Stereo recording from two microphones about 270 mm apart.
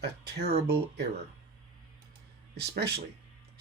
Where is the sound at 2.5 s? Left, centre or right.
Right.